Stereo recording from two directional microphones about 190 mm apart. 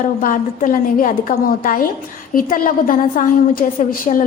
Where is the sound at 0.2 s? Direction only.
45° left (ahead or behind).